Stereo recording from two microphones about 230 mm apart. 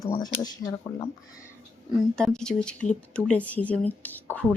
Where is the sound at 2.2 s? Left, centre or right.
Centre.